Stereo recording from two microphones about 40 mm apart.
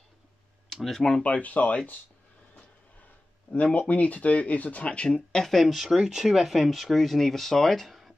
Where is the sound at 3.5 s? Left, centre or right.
Left.